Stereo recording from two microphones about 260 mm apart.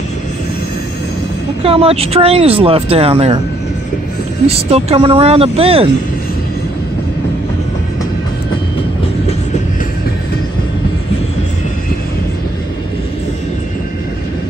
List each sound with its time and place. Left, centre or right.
1.6 s speech: right
4.5 s speech: right